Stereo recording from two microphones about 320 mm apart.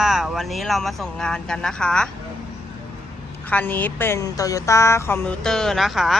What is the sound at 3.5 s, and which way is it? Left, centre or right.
Speech, centre.